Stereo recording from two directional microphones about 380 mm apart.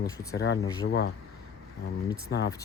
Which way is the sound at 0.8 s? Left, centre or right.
Left.